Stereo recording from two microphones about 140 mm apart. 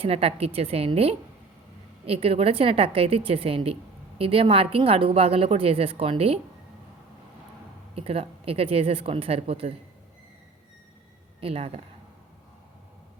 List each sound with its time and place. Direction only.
0.0 s a woman's voice: 45° right (ahead or behind)
7.9 s a woman's voice: 45° right (ahead or behind)
11.3 s speech: 45° right (ahead or behind)